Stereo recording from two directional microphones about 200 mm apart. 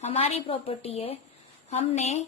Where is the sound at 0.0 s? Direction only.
30° left (ahead or behind).